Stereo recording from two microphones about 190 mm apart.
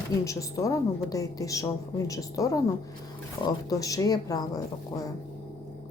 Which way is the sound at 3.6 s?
20° left (ahead or behind).